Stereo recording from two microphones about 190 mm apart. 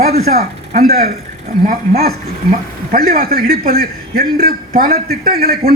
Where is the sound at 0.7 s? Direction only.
45° right (ahead or behind).